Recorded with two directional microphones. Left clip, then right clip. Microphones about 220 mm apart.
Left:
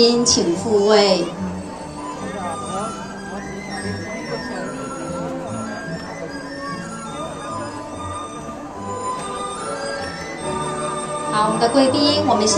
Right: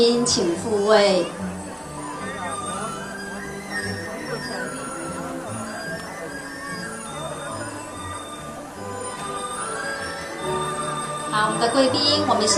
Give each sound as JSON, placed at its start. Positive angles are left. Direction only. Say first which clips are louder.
{"t": 0.0, "sound": "speech", "louder": "left 3 dB", "side_deg": 25}
{"t": 11.3, "sound": "a woman's voice", "louder": "left 3 dB", "side_deg": 25}